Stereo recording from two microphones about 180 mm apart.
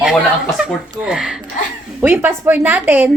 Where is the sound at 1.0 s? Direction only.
5° right (ahead or behind).